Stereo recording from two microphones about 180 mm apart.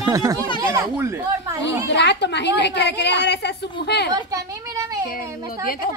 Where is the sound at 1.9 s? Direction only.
75° left (ahead or behind).